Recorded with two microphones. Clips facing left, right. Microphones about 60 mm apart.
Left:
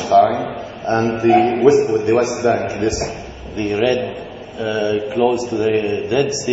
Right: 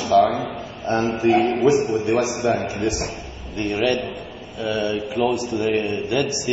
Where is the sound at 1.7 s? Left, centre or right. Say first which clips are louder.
Left 5 dB; centre.